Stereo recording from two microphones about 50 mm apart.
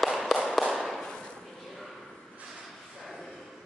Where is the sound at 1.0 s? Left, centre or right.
Centre.